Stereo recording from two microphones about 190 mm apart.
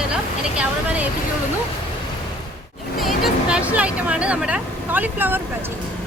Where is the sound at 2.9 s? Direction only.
Centre (ahead or behind).